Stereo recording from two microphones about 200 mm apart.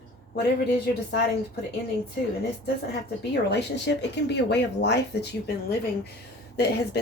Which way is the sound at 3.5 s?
60° left (ahead or behind).